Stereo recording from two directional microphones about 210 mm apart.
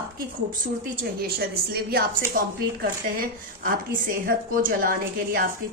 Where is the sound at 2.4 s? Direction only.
40° right (ahead or behind).